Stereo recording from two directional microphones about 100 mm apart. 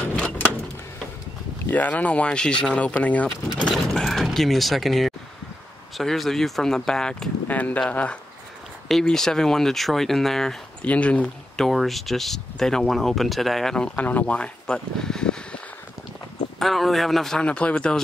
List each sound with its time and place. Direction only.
1.7 s speech: 15° left (ahead or behind)